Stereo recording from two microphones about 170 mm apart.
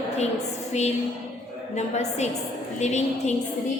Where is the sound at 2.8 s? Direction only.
40° left (ahead or behind).